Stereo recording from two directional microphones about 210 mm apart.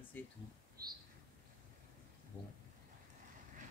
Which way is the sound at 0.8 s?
45° right (ahead or behind).